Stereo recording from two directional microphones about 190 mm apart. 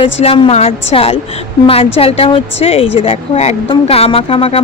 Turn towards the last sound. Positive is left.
turn(degrees=30)  # may be behind; listen again after turning